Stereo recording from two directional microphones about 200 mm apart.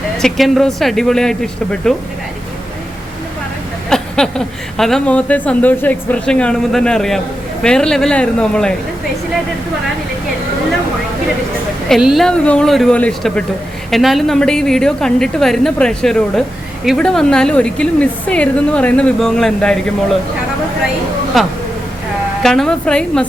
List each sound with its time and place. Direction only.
0.2 s a woman's voice: centre (ahead or behind)
3.8 s a woman's voice: 5° left (ahead or behind)
11.9 s a woman's voice: centre (ahead or behind)
21.3 s a woman's voice: centre (ahead or behind)